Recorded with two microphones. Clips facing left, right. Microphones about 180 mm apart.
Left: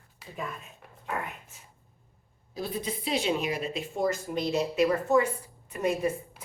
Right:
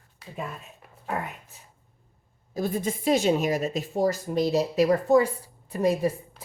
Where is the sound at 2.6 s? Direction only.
45° right (ahead or behind).